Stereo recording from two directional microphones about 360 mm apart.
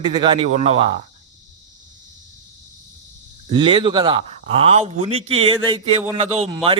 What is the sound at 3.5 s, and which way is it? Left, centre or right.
Speech, centre.